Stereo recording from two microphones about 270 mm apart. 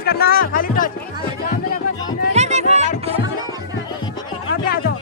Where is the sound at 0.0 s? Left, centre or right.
Left.